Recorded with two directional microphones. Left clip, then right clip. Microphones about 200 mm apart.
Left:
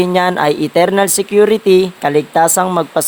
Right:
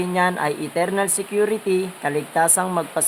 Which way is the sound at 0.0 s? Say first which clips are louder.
Left 8 dB; 35° left (ahead or behind).